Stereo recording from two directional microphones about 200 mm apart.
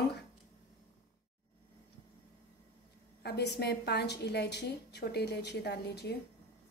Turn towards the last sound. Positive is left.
turn(degrees=55)  # may be behind; listen again after turning